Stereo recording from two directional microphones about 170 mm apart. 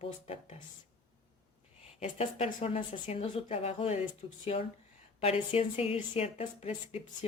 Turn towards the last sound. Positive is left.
turn(degrees=35)  # may be behind; listen again after turning